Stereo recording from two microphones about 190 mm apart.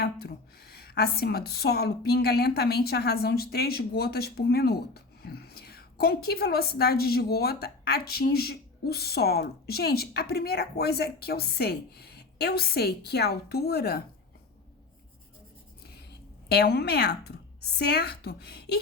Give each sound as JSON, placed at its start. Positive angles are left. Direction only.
{"t": 0.0, "sound": "a woman's voice", "side_deg": 55}
{"t": 16.0, "sound": "a woman's voice", "side_deg": 60}